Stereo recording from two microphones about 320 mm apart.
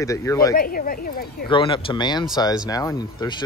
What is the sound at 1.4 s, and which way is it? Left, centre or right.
Speech, centre.